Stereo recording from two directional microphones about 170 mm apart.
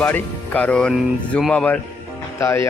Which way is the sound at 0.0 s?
10° left (ahead or behind).